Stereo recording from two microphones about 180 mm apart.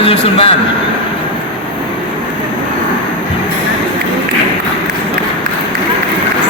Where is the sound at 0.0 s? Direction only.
30° left (ahead or behind).